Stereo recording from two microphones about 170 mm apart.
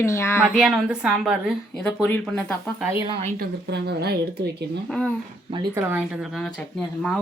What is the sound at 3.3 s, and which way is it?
Speech, 70° right (ahead or behind).